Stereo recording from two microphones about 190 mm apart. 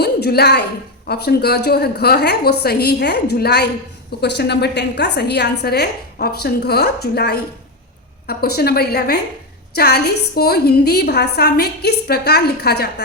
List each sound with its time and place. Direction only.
0.0 s a woman's voice: 60° left (ahead or behind)